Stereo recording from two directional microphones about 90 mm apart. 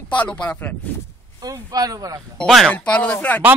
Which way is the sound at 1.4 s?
45° right (ahead or behind).